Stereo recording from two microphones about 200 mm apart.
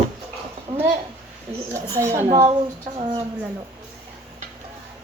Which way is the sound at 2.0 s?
15° right (ahead or behind).